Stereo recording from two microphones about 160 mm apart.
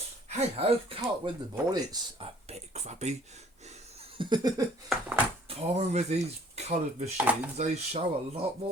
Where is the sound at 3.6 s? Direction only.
45° right (ahead or behind).